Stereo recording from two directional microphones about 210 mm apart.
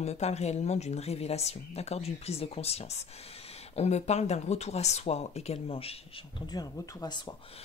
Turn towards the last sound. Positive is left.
turn(degrees=20)  # may be behind; listen again after turning